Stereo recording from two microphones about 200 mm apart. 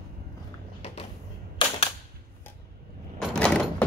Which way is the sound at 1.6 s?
25° left (ahead or behind).